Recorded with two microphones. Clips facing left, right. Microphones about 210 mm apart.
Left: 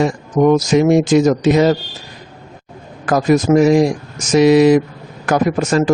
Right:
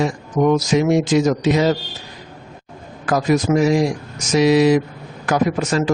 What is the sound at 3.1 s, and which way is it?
A man's voice, 50° left (ahead or behind).